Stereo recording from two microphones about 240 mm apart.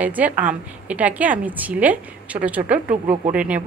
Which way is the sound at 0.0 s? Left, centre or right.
Centre.